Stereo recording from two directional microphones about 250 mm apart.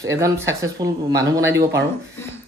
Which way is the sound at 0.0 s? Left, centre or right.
Centre.